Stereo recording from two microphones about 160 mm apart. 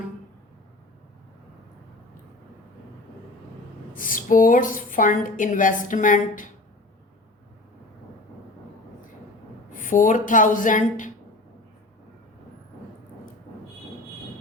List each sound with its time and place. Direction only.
3.9 s a woman's voice: 60° left (ahead or behind)
9.7 s speech: 55° left (ahead or behind)